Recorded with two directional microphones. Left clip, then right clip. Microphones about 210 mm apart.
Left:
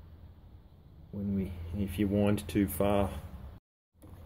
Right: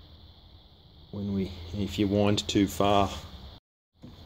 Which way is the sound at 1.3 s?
25° right (ahead or behind).